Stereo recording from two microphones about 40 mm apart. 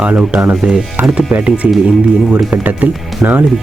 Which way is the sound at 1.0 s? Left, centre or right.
Centre.